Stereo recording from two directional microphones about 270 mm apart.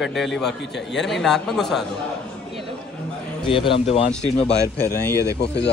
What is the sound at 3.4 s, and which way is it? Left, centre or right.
Speech, centre.